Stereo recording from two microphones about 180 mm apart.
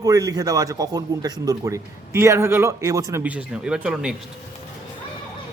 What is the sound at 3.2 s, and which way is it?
Speech, 5° right (ahead or behind).